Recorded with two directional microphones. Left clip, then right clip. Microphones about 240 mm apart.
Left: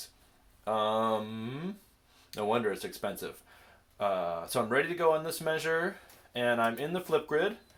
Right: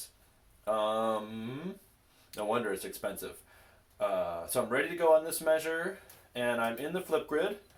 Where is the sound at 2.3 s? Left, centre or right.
Left.